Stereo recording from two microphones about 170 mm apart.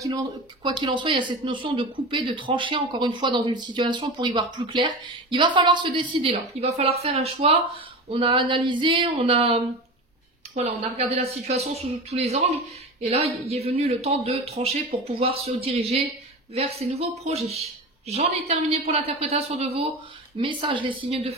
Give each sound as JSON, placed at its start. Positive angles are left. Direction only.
{"t": 0.7, "sound": "speech", "side_deg": -25}